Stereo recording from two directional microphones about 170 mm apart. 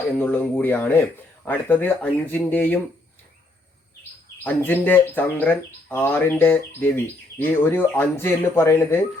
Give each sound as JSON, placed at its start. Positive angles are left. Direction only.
{"t": 0.2, "sound": "speech", "side_deg": 10}
{"t": 4.4, "sound": "speech", "side_deg": 10}